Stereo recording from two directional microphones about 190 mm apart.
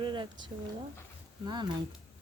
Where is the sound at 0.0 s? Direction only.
25° right (ahead or behind).